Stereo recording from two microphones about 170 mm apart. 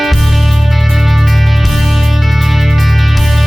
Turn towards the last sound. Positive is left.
turn(degrees=0)  # may be behind; listen again after turning